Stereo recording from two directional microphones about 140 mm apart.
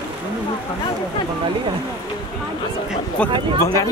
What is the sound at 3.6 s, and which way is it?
Speech, 25° left (ahead or behind).